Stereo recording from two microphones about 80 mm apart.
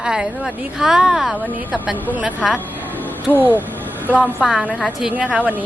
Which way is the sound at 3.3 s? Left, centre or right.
Left.